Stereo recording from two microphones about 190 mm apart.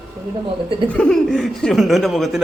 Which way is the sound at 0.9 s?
5° left (ahead or behind).